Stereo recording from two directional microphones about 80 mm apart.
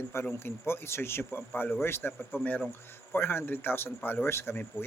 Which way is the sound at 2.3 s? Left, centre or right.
Centre.